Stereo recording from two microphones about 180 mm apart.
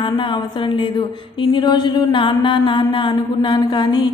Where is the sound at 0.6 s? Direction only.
25° left (ahead or behind).